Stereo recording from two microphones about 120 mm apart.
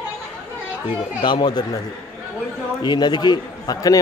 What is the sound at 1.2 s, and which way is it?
Speech, 40° left (ahead or behind).